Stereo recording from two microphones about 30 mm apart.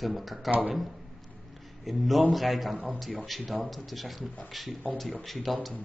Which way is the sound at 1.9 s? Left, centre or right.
Centre.